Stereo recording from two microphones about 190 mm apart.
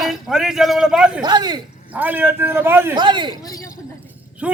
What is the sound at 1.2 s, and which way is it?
Speech, 20° right (ahead or behind).